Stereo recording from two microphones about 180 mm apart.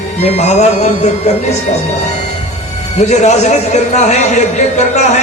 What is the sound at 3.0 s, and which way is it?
Speech, 40° left (ahead or behind).